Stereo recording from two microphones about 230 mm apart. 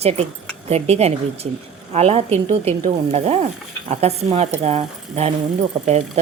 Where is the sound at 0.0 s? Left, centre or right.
Right.